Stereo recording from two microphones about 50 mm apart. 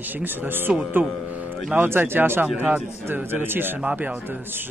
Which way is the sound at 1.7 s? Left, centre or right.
Right.